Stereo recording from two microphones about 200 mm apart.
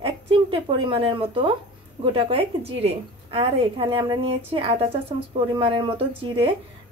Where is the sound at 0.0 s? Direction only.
25° right (ahead or behind).